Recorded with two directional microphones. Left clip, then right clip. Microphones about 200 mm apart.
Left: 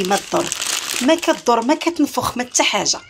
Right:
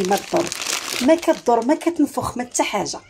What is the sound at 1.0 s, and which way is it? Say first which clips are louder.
Speech: even; 10° right (ahead or behind).